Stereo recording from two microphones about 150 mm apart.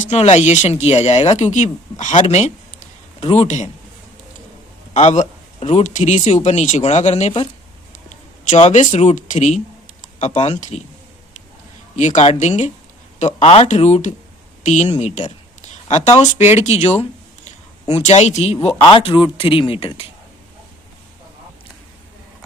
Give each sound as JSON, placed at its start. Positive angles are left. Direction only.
{"t": 0.0, "sound": "speech", "side_deg": 50}
{"t": 4.9, "sound": "speech", "side_deg": 50}
{"t": 8.4, "sound": "speech", "side_deg": 50}
{"t": 11.9, "sound": "a man's voice", "side_deg": 55}
{"t": 18.6, "sound": "speech", "side_deg": 30}